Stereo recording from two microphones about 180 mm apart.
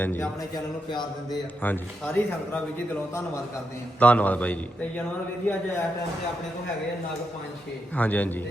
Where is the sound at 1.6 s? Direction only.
10° left (ahead or behind).